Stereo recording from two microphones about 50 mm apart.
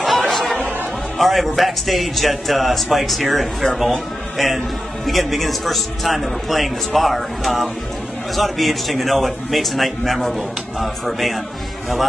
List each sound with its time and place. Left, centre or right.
0.0 s chatter: centre
1.1 s speech: centre
5.0 s speech: centre